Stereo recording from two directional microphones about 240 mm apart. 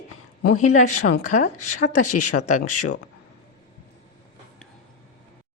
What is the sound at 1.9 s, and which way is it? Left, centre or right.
Speech, left.